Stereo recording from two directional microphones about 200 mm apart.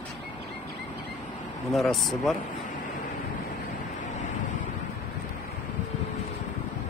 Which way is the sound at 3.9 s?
40° left (ahead or behind).